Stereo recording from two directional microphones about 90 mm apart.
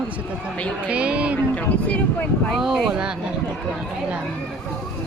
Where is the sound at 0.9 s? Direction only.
15° right (ahead or behind).